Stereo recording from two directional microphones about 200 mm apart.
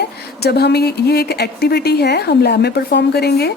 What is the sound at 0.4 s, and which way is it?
A woman's voice, 55° left (ahead or behind).